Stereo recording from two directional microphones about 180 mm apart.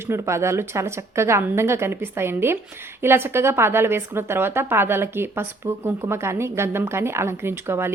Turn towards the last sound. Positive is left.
turn(degrees=-15)  # may be behind; listen again after turning